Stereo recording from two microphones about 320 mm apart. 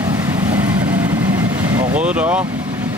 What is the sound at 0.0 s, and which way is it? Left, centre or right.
Vehicle, centre.